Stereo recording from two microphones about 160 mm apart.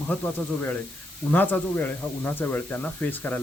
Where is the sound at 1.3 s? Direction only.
10° left (ahead or behind).